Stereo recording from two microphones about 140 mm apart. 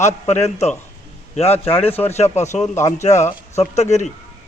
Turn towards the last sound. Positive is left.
turn(degrees=55)  # may be behind; listen again after turning